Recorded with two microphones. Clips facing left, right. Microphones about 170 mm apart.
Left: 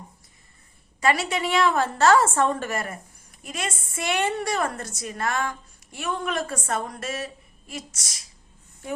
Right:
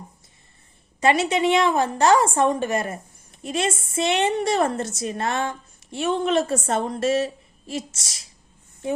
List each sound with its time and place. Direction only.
0.9 s a woman's voice: 20° right (ahead or behind)